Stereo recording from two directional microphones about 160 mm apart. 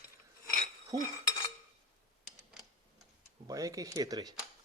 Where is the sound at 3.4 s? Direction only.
20° right (ahead or behind).